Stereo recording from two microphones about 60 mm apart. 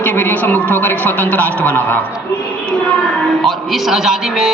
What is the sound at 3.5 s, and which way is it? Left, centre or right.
A man's voice, centre.